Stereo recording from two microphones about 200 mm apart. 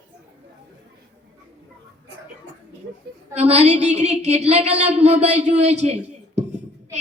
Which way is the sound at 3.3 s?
30° right (ahead or behind).